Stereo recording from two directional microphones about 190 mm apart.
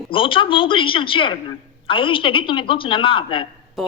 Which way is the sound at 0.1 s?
25° left (ahead or behind).